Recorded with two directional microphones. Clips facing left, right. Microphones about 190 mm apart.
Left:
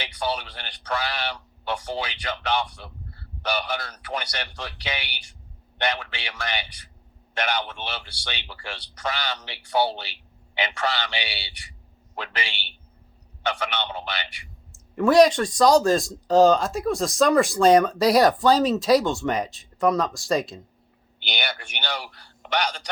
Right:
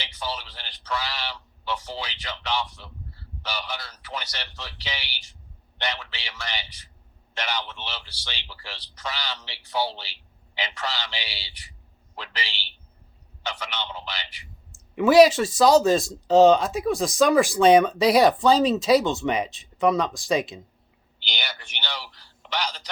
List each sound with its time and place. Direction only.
0.0 s a man's voice: 55° left (ahead or behind)
14.7 s speech: centre (ahead or behind)
21.2 s a man's voice: 55° left (ahead or behind)